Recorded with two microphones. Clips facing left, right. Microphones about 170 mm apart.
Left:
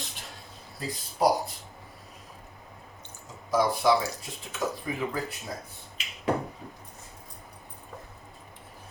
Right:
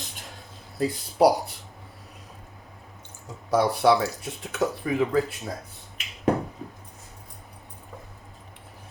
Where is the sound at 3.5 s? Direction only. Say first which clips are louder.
Right 3 dB; 70° right (ahead or behind).